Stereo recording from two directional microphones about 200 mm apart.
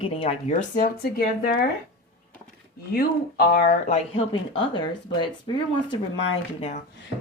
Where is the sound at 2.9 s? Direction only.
45° left (ahead or behind).